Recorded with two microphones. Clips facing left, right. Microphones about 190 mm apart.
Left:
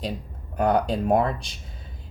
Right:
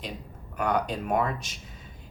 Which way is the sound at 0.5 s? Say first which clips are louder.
Left 5 dB; 30° left (ahead or behind).